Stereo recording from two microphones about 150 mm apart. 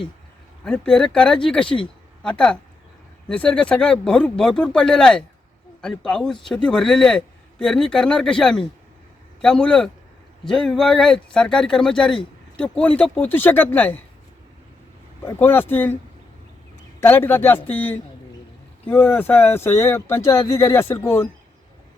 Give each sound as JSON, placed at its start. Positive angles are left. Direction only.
{"t": 0.6, "sound": "speech", "side_deg": 5}
{"t": 15.2, "sound": "speech", "side_deg": 15}
{"t": 17.0, "sound": "speech", "side_deg": 15}